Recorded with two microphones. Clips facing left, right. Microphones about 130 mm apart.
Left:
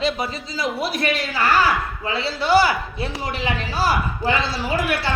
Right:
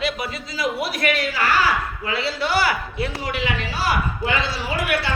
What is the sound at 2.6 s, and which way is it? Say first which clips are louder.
A man's voice: left 1 dB; 25° left (ahead or behind).